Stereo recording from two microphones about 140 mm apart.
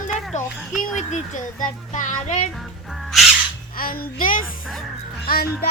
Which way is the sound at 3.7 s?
90° left.